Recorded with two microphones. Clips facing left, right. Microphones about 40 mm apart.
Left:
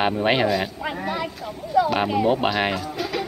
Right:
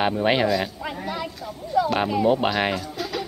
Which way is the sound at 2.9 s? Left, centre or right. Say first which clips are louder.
Left 2 dB; centre.